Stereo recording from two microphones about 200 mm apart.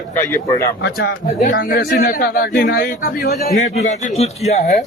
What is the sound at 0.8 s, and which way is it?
Speech, 60° left (ahead or behind).